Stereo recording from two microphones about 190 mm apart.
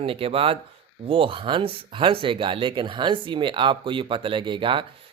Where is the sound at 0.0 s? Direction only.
30° right (ahead or behind).